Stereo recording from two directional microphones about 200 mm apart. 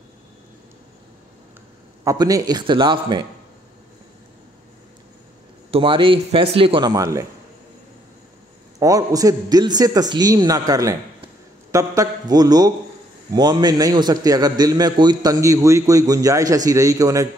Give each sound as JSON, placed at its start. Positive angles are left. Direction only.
{"t": 2.0, "sound": "a man's voice", "side_deg": -15}
{"t": 5.7, "sound": "a man's voice", "side_deg": -25}
{"t": 8.7, "sound": "a man's voice", "side_deg": -15}